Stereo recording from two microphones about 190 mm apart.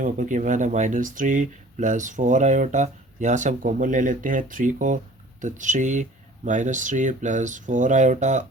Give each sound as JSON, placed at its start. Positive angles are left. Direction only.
{"t": 0.0, "sound": "speech", "side_deg": -45}